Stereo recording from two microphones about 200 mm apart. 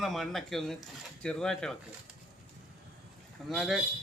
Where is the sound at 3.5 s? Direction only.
Centre (ahead or behind).